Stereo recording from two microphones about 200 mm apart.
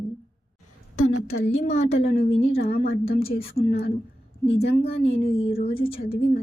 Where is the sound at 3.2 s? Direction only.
30° left (ahead or behind).